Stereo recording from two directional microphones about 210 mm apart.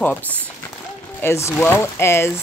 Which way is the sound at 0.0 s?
10° left (ahead or behind).